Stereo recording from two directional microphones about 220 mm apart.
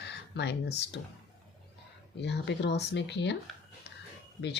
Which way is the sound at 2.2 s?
50° left (ahead or behind).